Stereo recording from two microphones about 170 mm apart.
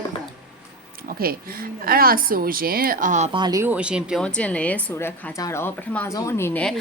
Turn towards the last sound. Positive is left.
turn(degrees=5)  # may be behind; listen again after turning